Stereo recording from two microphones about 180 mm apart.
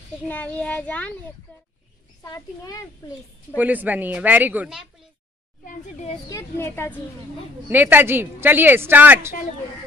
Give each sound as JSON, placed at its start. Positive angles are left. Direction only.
{"t": 0.3, "sound": "a child's voice", "side_deg": 10}
{"t": 2.2, "sound": "speech", "side_deg": 20}
{"t": 3.5, "sound": "a woman's voice", "side_deg": -10}
{"t": 5.7, "sound": "speech", "side_deg": 40}
{"t": 6.2, "sound": "a child's voice", "side_deg": 15}
{"t": 7.6, "sound": "a woman's voice", "side_deg": -10}